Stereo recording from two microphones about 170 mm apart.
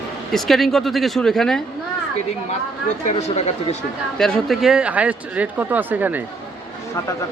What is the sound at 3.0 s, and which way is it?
Speech, 40° left (ahead or behind).